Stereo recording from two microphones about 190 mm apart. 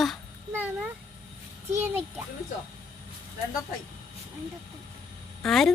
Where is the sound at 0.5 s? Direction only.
10° right (ahead or behind).